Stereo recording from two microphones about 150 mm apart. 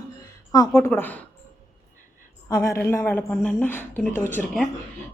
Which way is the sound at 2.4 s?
20° left (ahead or behind).